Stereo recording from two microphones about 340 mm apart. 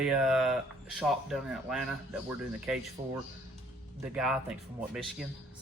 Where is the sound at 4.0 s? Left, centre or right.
Centre.